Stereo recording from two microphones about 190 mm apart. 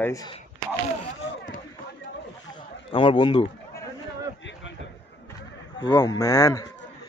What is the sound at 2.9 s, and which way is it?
Speech, 25° left (ahead or behind).